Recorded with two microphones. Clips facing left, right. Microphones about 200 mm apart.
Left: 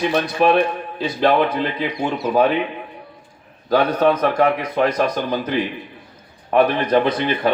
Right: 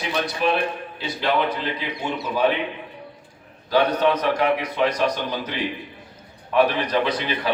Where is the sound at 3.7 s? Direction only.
50° left (ahead or behind).